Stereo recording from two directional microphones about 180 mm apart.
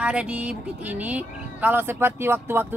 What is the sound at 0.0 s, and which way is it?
Speech, 5° right (ahead or behind).